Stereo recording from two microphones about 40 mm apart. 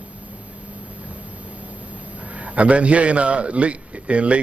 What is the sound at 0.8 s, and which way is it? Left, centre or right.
Speech, right.